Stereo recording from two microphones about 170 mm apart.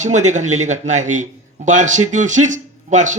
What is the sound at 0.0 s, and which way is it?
A man's voice, 45° right (ahead or behind).